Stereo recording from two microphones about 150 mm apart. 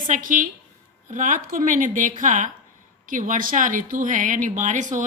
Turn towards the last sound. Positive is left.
turn(degrees=-55)  # may be behind; listen again after turning